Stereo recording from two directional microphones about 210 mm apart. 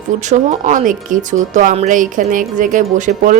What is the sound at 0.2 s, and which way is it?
Speech, 35° right (ahead or behind).